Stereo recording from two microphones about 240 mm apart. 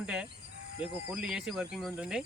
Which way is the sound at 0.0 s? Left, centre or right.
Centre.